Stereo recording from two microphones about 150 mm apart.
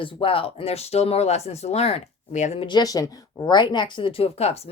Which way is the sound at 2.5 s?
30° left (ahead or behind).